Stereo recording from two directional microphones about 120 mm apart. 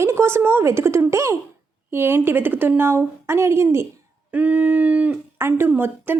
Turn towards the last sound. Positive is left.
turn(degrees=-20)  # may be behind; listen again after turning